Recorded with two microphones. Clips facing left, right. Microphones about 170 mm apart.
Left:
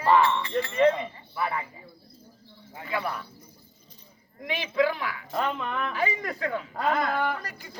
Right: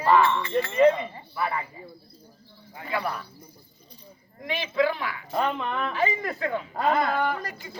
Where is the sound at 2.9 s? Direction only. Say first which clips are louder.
Right 1 dB; centre (ahead or behind).